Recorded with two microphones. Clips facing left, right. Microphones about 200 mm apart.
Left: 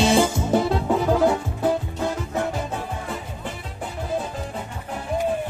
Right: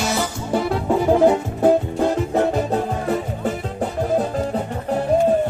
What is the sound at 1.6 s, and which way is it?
Music, 50° right (ahead or behind).